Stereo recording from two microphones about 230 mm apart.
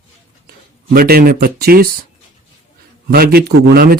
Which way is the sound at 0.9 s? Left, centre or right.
Right.